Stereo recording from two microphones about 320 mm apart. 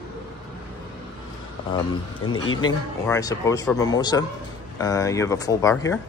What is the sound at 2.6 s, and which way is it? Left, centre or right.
Speech, centre.